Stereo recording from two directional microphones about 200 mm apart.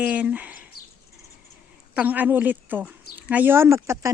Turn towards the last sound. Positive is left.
turn(degrees=-15)  # may be behind; listen again after turning